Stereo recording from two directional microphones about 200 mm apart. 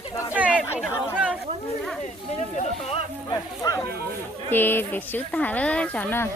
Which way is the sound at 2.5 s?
35° left (ahead or behind).